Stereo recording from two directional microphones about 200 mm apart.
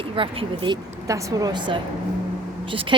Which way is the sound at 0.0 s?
25° right (ahead or behind).